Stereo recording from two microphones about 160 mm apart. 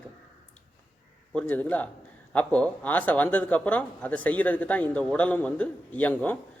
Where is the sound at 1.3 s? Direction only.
10° left (ahead or behind).